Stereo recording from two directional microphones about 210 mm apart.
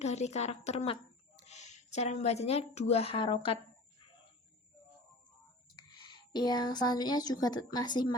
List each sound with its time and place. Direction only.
0.0 s a woman's voice: 30° left (ahead or behind)
5.7 s speech: 20° left (ahead or behind)